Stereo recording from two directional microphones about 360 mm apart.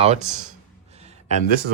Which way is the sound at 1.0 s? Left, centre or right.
Centre.